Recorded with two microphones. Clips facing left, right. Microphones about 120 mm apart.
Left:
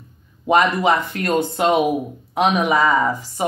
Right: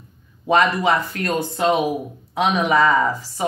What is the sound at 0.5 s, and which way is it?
Speech, 15° left (ahead or behind).